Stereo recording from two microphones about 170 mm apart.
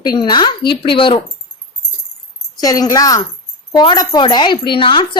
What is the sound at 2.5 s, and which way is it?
A woman's voice, 20° left (ahead or behind).